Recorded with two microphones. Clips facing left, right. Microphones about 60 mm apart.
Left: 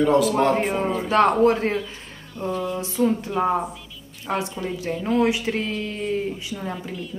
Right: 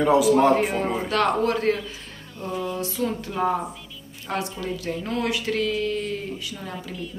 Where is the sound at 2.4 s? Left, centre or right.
Left.